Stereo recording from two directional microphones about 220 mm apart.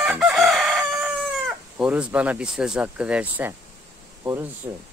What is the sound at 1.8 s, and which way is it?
Speech, 5° right (ahead or behind).